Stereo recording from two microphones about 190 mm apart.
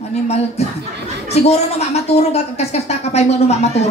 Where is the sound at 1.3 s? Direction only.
35° left (ahead or behind).